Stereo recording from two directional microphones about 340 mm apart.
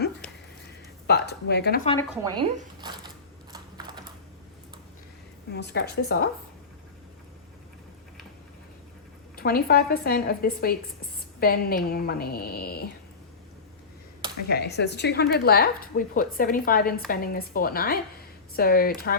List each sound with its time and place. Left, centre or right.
1.0 s speech: left
2.3 s a sound: centre
3.5 s typing: centre
5.5 s speech: left
9.3 s speech: left
14.4 s speech: left